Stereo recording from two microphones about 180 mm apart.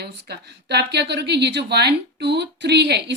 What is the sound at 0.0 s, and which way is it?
Speech, 65° right (ahead or behind).